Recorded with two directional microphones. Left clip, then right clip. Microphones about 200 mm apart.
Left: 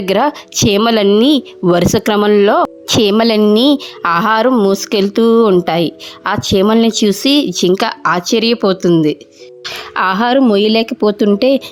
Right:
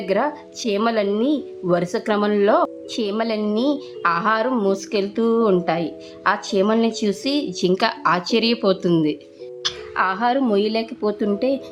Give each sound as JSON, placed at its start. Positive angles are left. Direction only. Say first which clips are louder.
{"t": 0.0, "sound": "speech", "louder": "left 8 dB", "side_deg": 50}
{"t": 9.7, "sound": "speech", "louder": "left 9 dB", "side_deg": 45}